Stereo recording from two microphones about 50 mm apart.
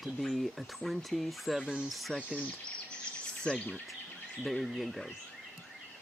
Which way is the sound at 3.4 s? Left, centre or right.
Left.